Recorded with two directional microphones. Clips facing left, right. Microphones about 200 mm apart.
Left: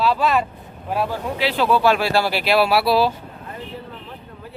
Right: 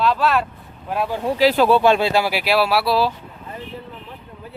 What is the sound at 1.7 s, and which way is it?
Speech, 25° right (ahead or behind).